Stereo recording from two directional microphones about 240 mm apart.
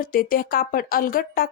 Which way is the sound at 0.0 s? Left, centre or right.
Left.